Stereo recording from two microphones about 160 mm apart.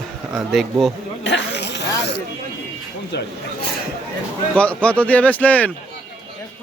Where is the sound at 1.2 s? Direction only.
90° left.